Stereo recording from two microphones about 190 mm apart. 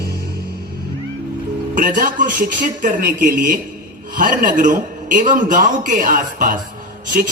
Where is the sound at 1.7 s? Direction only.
45° right (ahead or behind).